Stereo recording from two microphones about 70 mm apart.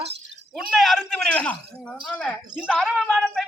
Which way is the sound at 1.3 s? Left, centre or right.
Centre.